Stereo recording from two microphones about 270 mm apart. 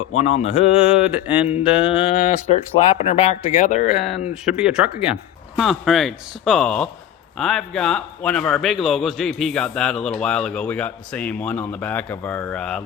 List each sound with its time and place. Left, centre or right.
0.2 s speech: left
1.1 s a man's voice: centre
2.0 s speech: left
3.9 s a man's voice: centre